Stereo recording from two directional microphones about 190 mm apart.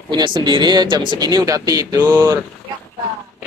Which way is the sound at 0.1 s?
25° right (ahead or behind).